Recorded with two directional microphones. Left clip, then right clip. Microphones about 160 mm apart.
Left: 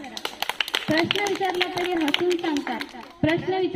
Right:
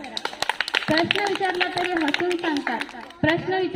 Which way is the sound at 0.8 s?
85° right.